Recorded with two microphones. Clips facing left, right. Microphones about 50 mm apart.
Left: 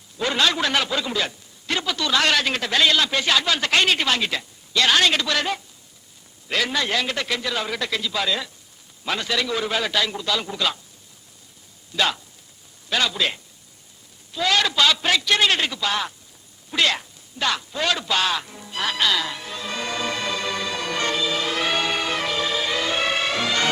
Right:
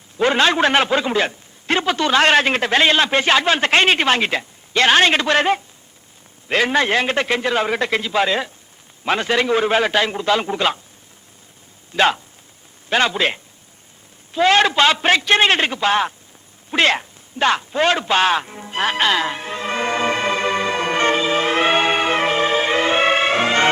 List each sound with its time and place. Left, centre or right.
0.2 s a man's voice: right
11.9 s a man's voice: right
16.7 s music: right